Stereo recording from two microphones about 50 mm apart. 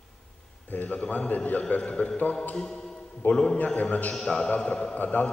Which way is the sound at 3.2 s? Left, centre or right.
Left.